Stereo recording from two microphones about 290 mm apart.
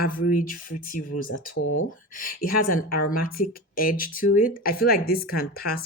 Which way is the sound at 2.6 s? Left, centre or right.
Left.